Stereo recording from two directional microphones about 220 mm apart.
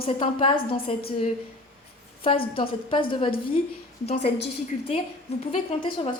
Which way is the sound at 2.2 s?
25° left (ahead or behind).